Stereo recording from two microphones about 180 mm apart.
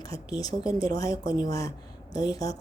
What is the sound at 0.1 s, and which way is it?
Speech, 20° left (ahead or behind).